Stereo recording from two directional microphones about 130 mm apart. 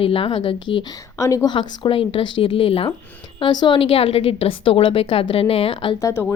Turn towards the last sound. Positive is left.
turn(degrees=20)  # may be behind; listen again after turning